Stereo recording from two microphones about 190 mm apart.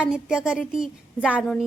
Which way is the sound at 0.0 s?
5° right (ahead or behind).